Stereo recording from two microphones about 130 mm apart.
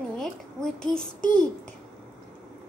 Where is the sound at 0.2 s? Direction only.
5° left (ahead or behind).